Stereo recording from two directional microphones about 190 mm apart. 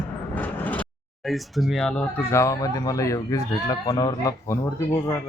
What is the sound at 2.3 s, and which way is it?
Speech, 15° left (ahead or behind).